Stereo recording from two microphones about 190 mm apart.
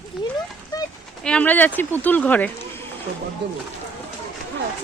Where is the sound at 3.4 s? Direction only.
65° right (ahead or behind).